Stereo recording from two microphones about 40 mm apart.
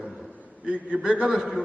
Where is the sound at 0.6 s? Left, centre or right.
Right.